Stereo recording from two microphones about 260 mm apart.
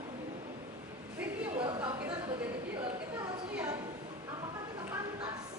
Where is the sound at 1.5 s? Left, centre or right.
Centre.